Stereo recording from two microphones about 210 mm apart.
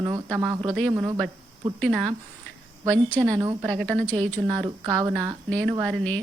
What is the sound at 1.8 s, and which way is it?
A woman's voice, centre (ahead or behind).